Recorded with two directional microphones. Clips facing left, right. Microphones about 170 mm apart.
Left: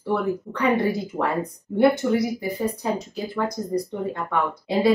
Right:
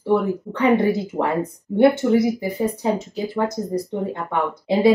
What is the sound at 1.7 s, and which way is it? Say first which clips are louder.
Speech: right 3 dB; 25° right (ahead or behind).